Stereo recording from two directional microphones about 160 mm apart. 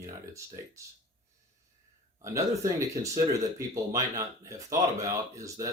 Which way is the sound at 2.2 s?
20° right (ahead or behind).